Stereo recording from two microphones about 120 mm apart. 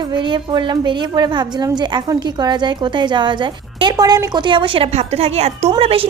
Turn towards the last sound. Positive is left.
turn(degrees=-55)  # may be behind; listen again after turning